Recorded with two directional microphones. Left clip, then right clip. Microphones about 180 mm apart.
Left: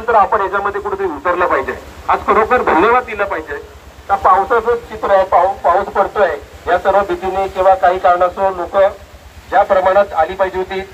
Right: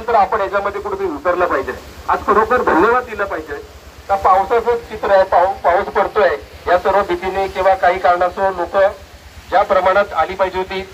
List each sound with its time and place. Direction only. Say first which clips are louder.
0.0 s speech: left 2 dB; 35° right (ahead or behind)
0.4 s a man's voice: left 2 dB; 50° right (ahead or behind)
5.4 s speech: left 1 dB; 15° left (ahead or behind)